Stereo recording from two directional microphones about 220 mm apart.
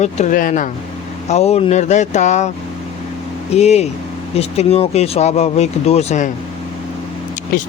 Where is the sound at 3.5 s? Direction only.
30° left (ahead or behind).